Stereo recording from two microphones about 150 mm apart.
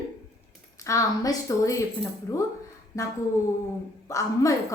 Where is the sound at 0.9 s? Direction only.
20° left (ahead or behind).